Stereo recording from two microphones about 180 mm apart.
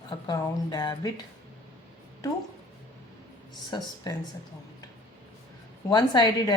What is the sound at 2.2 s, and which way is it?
Speech, 20° left (ahead or behind).